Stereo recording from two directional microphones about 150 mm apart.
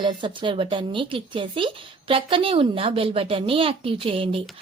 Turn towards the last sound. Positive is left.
turn(degrees=-40)  # may be behind; listen again after turning